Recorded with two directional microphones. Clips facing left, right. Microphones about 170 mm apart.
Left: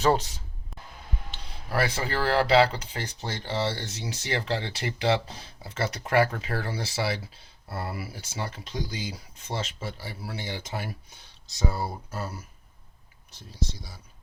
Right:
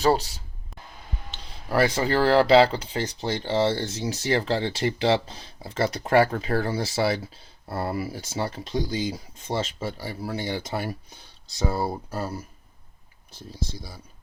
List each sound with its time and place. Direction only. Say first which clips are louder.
0.0 s speech: right 2 dB; 35° right (ahead or behind)
8.7 s speech: right 7 dB; 30° right (ahead or behind)